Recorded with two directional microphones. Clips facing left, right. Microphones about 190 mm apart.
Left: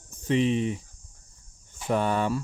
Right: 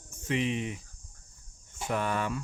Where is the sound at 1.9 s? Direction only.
30° left (ahead or behind).